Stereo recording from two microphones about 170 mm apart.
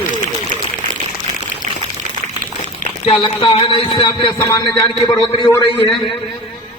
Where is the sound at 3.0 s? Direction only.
30° left (ahead or behind).